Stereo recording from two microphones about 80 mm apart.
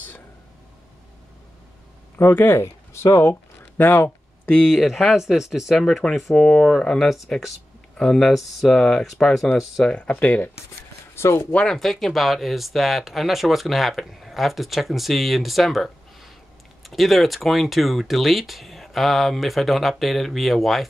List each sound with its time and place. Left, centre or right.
2.1 s speech: left
2.5 s a sound: left
4.6 s speech: centre
9.8 s speech: centre
11.1 s speech: left
11.5 s speech: centre